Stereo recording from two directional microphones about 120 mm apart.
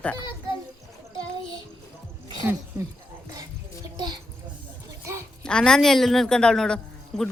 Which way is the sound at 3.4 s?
35° right (ahead or behind).